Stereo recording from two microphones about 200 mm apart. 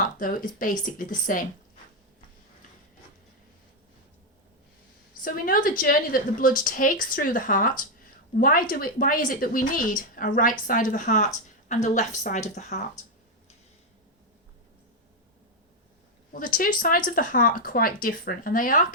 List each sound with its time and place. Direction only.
0.0 s a woman's voice: 45° left (ahead or behind)
5.2 s a woman's voice: 45° left (ahead or behind)
16.3 s a woman's voice: 45° left (ahead or behind)